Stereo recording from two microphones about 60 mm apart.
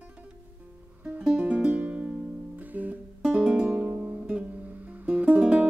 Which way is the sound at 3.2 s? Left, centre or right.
Centre.